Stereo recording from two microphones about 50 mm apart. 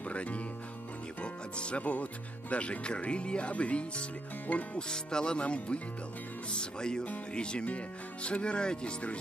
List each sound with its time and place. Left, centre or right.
0.0 s music: left
2.5 s speech: left